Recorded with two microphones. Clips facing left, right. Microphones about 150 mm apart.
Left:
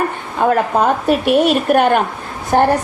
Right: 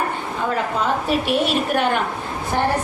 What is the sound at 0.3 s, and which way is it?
A woman's voice, 55° left (ahead or behind).